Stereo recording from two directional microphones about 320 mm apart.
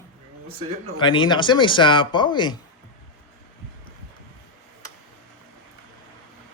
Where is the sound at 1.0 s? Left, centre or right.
Centre.